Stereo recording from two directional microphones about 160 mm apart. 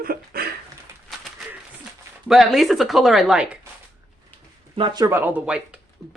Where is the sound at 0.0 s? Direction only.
65° right (ahead or behind).